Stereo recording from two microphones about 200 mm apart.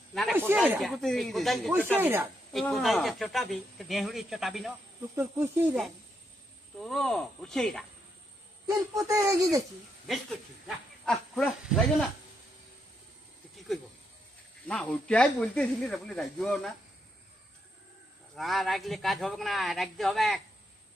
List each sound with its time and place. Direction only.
0.1 s snake: centre (ahead or behind)
0.3 s speech: 10° right (ahead or behind)
2.0 s speech: 10° right (ahead or behind)
2.5 s speech: centre (ahead or behind)
5.1 s speech: 10° right (ahead or behind)
6.7 s speech: centre (ahead or behind)
8.7 s speech: 15° right (ahead or behind)
10.1 s speech: centre (ahead or behind)
14.7 s speech: 5° left (ahead or behind)
18.3 s speech: centre (ahead or behind)